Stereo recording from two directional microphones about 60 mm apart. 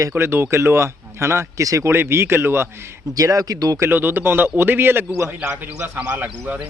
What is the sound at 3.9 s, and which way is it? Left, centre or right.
A man's voice, right.